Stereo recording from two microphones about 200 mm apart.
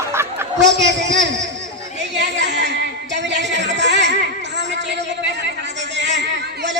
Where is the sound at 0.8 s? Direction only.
65° right (ahead or behind).